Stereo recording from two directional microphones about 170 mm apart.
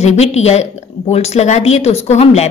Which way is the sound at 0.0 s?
40° left (ahead or behind).